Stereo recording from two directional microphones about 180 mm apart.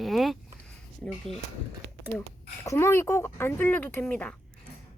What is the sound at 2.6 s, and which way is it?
Speech, 15° left (ahead or behind).